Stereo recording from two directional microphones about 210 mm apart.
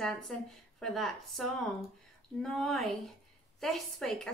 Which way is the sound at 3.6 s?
Centre (ahead or behind).